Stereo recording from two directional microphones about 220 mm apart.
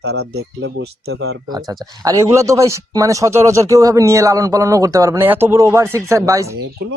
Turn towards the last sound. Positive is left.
turn(degrees=-15)  # may be behind; listen again after turning